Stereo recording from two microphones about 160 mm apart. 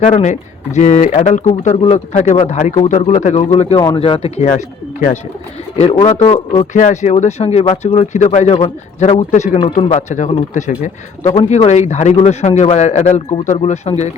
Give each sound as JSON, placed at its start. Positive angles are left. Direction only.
{"t": 0.0, "sound": "speech", "side_deg": 50}
{"t": 3.8, "sound": "speech", "side_deg": 30}
{"t": 4.4, "sound": "speech", "side_deg": 55}
{"t": 5.7, "sound": "speech", "side_deg": 35}
{"t": 6.7, "sound": "speech", "side_deg": 50}